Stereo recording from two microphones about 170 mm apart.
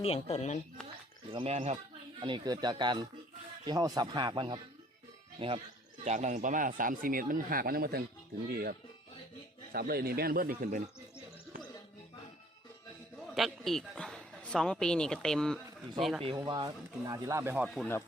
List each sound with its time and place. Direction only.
0.0 s speech: 35° left (ahead or behind)
1.3 s speech: 35° right (ahead or behind)
2.2 s speech: 25° right (ahead or behind)
6.1 s speech: 45° right (ahead or behind); by 8.7 s 65° right (ahead or behind)
9.7 s speech: 65° right (ahead or behind)
13.3 s speech: centre (ahead or behind)
16.3 s speech: 20° right (ahead or behind)